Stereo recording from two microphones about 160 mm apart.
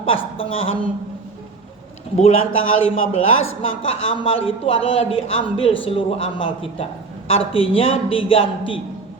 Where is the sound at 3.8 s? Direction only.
35° left (ahead or behind).